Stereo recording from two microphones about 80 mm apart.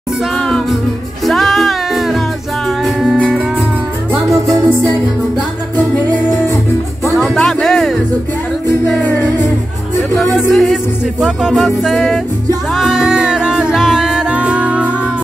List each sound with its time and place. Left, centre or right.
0.4 s music: centre
1.2 s music: centre
7.2 s music: centre
10.3 s music: centre